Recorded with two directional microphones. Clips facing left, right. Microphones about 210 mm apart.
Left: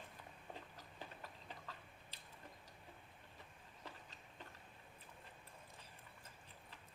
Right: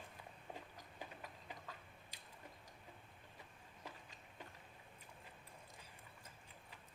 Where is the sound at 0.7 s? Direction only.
15° right (ahead or behind).